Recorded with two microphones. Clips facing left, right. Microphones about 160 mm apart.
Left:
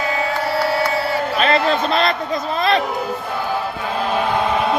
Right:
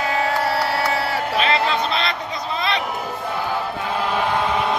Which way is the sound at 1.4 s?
45° left (ahead or behind).